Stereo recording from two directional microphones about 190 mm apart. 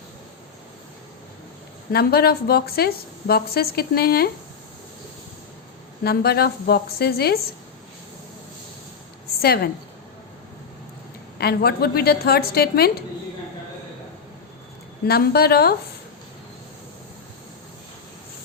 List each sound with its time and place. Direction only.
1.9 s a woman's voice: 55° left (ahead or behind)
6.0 s a woman's voice: 55° left (ahead or behind)
9.4 s a woman's voice: 55° left (ahead or behind)
11.3 s a woman's voice: 55° left (ahead or behind)
15.0 s a woman's voice: 55° left (ahead or behind)